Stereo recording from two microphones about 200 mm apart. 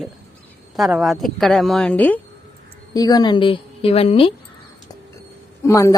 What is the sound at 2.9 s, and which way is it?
A woman's voice, 20° left (ahead or behind).